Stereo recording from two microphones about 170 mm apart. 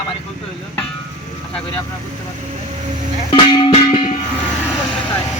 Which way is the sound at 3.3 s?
30° left (ahead or behind).